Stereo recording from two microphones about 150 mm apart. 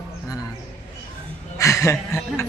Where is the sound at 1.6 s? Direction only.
20° left (ahead or behind).